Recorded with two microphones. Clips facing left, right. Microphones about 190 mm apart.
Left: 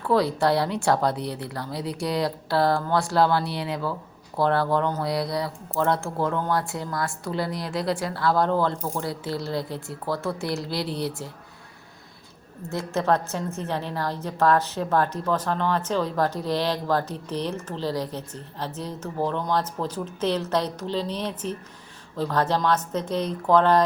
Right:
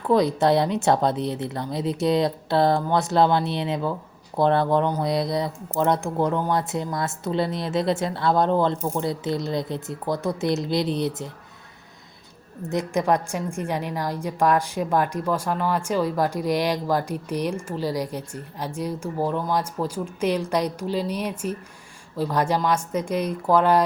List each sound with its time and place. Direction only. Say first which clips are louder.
0.0 s speech: right 2 dB; 20° right (ahead or behind)
12.6 s a woman's voice: right 2 dB; 15° right (ahead or behind)